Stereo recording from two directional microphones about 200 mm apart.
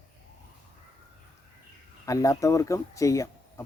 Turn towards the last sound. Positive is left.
turn(degrees=15)  # may be behind; listen again after turning